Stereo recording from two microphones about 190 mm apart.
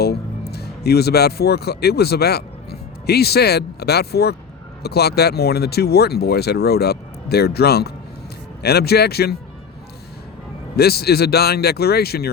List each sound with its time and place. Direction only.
0.0 s speech: 55° left (ahead or behind)
10.8 s speech: 55° left (ahead or behind)